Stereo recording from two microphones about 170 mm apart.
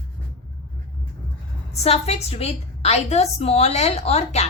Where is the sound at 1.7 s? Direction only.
40° left (ahead or behind).